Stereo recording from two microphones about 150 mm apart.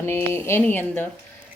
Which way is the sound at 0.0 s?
15° left (ahead or behind).